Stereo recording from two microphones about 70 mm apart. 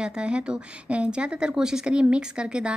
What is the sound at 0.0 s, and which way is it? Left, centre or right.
A woman's voice, centre.